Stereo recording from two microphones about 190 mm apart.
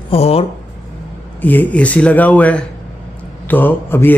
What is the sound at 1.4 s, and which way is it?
Speech, 10° left (ahead or behind).